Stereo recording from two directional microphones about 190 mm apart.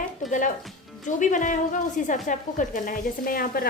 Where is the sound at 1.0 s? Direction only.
40° left (ahead or behind).